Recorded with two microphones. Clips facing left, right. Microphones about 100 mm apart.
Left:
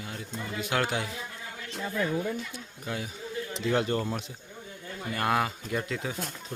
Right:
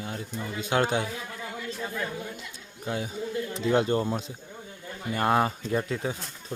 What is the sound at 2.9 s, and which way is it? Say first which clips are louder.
Speech: right 5 dB; 25° right (ahead or behind).